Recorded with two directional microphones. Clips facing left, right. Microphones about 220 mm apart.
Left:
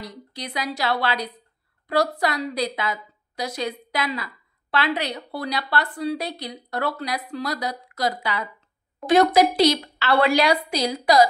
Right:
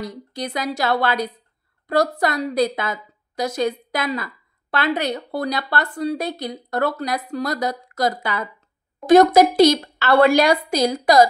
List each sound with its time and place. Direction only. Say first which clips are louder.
0.0 s a woman's voice: right 7 dB; 45° right (ahead or behind)